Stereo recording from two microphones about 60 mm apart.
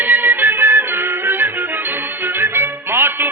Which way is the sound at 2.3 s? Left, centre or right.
Right.